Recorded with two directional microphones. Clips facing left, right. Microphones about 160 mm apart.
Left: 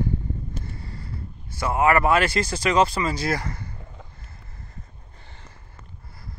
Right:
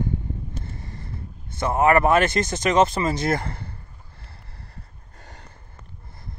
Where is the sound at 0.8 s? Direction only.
20° right (ahead or behind).